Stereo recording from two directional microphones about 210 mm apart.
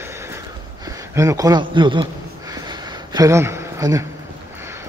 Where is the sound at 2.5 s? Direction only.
15° right (ahead or behind).